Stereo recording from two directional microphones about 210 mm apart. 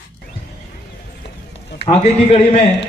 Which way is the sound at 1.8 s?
25° left (ahead or behind).